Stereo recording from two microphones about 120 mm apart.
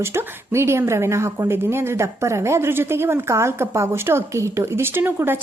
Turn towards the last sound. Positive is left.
turn(degrees=-20)  # may be behind; listen again after turning